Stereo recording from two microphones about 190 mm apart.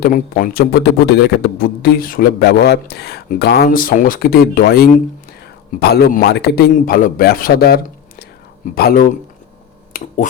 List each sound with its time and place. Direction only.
0.0 s a man's voice: 50° left (ahead or behind)